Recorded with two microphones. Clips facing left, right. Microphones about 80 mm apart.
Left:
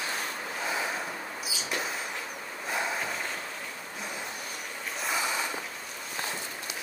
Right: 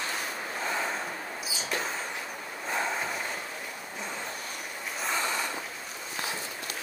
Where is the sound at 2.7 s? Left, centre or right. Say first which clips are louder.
Right 1 dB; centre.